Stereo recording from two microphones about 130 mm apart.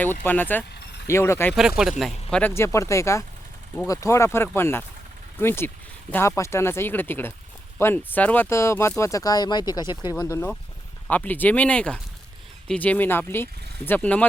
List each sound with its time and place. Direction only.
0.0 s speech: 15° left (ahead or behind)
1.5 s speech: 5° right (ahead or behind)
2.4 s speech: 20° left (ahead or behind)